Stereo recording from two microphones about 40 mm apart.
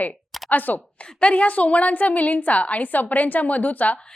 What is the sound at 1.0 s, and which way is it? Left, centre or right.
A woman's voice, left.